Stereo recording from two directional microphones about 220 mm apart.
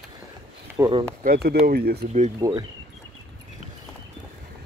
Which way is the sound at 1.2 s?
45° right (ahead or behind).